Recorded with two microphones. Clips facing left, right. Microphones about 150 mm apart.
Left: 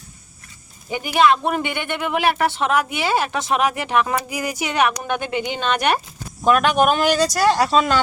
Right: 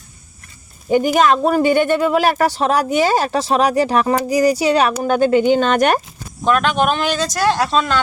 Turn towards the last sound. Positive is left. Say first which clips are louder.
# even
turn(degrees=10)  # may be behind; listen again after turning